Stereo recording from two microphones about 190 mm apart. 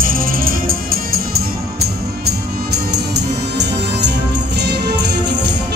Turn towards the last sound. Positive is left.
turn(degrees=-60)  # may be behind; listen again after turning